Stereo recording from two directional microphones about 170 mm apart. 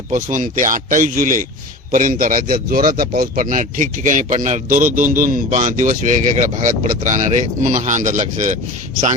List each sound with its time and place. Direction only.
0.1 s speech: 50° right (ahead or behind)